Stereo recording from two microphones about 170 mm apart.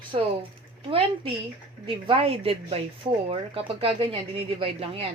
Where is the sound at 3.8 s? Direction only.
35° right (ahead or behind).